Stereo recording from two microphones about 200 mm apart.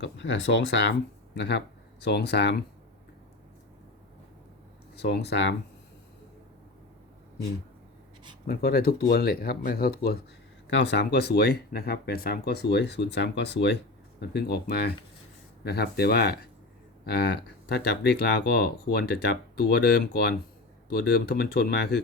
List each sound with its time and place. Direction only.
0.0 s speech: 65° left (ahead or behind)
4.9 s speech: 55° left (ahead or behind)
8.4 s speech: 50° left (ahead or behind)